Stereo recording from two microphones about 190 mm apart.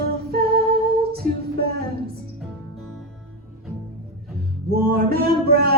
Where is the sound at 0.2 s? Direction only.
50° right (ahead or behind).